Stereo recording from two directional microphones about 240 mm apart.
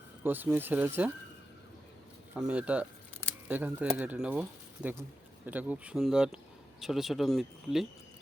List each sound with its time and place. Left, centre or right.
0.2 s speech: centre
2.3 s speech: centre